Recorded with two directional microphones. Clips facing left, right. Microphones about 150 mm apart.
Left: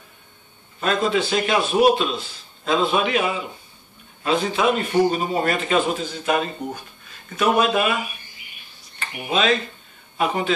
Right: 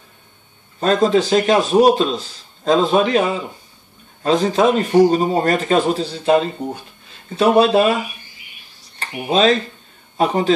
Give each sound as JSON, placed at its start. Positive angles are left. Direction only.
{"t": 0.7, "sound": "a man's voice", "side_deg": -35}
{"t": 8.8, "sound": "a sound", "side_deg": -35}
{"t": 10.1, "sound": "a man's voice", "side_deg": -35}